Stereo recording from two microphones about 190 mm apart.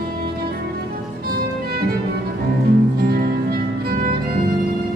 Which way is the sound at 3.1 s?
55° right (ahead or behind).